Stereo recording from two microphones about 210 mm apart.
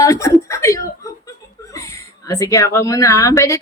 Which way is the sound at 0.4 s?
15° left (ahead or behind).